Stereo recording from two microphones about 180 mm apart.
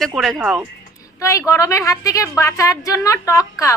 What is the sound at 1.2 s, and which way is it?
A woman's voice, 15° left (ahead or behind).